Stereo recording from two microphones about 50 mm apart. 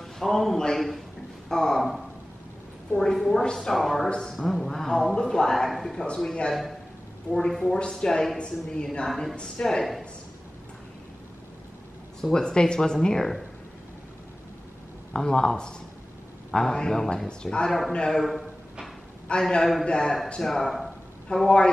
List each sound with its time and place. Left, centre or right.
0.0 s a man's voice: centre
4.1 s a woman's voice: centre
4.4 s a woman's voice: centre
7.3 s a woman's voice: centre
12.2 s a woman's voice: centre
15.1 s a woman's voice: centre
17.3 s a woman's voice: centre
17.6 s speech: centre
17.9 s a woman's voice: centre
18.2 s a sound: centre
19.4 s a woman's voice: centre
20.4 s speech: centre
21.3 s speech: centre